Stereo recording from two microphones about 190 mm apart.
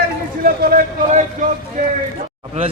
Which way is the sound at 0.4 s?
50° right (ahead or behind).